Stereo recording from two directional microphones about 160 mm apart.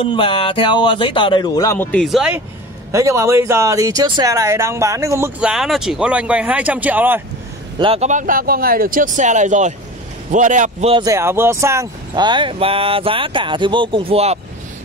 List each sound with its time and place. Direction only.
0.0 s speech: 30° left (ahead or behind)
1.9 s speech: centre (ahead or behind)
2.9 s speech: 20° right (ahead or behind)
5.4 s speech: 5° right (ahead or behind)
7.8 s speech: 40° right (ahead or behind)
11.1 s speech: 15° right (ahead or behind)
12.1 s speech: 30° right (ahead or behind)